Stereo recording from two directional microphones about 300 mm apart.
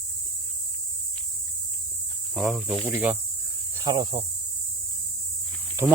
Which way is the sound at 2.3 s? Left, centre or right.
Centre.